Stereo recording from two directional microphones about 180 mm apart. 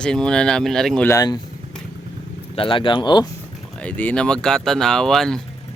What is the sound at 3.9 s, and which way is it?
Speech, 5° left (ahead or behind).